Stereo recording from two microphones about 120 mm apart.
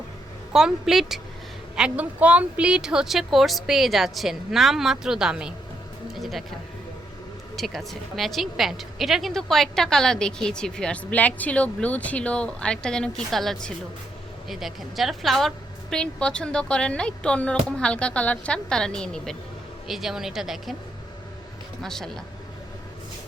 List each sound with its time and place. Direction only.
0.5 s a woman's voice: 5° right (ahead or behind)
6.1 s a sound: centre (ahead or behind)
7.5 s a woman's voice: centre (ahead or behind)
21.8 s a woman's voice: 5° left (ahead or behind)